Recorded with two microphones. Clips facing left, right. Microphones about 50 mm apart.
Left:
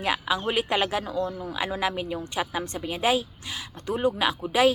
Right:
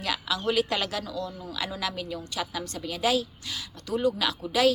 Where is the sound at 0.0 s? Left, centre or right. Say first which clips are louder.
Left 3 dB; left.